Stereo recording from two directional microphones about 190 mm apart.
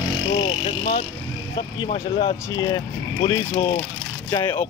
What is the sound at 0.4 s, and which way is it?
Speech, 25° left (ahead or behind).